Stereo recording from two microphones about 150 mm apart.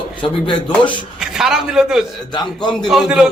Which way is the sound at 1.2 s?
5° right (ahead or behind).